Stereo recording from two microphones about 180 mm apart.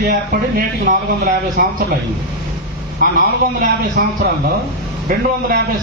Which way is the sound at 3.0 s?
55° right (ahead or behind).